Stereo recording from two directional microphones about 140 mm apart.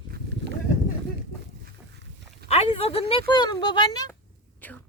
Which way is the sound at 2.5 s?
45° left (ahead or behind).